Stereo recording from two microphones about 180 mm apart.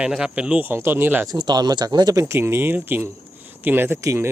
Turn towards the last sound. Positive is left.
turn(degrees=-15)  # may be behind; listen again after turning